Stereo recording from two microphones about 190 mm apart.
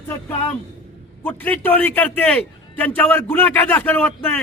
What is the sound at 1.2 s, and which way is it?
A man's voice, 10° left (ahead or behind).